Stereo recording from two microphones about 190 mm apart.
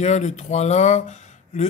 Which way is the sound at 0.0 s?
35° left (ahead or behind).